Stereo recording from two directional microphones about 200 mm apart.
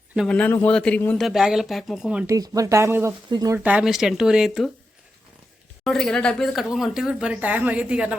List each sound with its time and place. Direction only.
0.3 s speech: 5° left (ahead or behind)
2.2 s speech: 15° right (ahead or behind)
3.6 s speech: 5° right (ahead or behind)
5.8 s speech: centre (ahead or behind)